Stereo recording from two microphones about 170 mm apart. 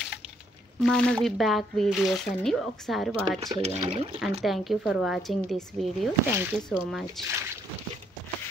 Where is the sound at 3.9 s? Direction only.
35° right (ahead or behind).